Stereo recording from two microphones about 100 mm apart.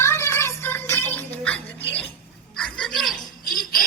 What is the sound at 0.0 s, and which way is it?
Music, 25° left (ahead or behind).